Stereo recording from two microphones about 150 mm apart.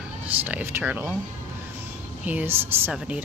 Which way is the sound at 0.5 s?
15° right (ahead or behind).